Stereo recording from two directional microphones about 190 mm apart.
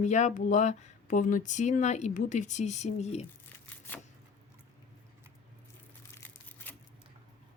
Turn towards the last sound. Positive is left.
turn(degrees=10)  # may be behind; listen again after turning